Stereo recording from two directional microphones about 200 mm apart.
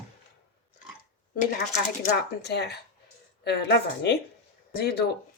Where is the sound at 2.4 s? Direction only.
55° left (ahead or behind).